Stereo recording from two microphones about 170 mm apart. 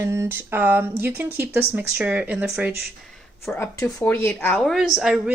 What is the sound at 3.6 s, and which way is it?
Speech, 15° left (ahead or behind).